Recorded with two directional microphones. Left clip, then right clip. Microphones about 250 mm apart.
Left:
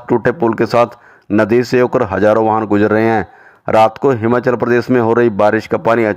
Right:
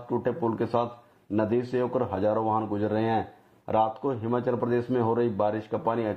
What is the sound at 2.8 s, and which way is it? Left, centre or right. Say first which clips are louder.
Speech: left 14 dB; left.